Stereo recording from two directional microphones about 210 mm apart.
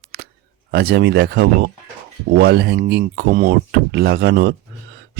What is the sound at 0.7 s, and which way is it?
Speech, 50° right (ahead or behind).